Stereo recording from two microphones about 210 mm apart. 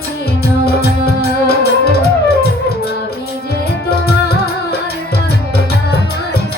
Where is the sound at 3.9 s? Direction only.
50° left (ahead or behind).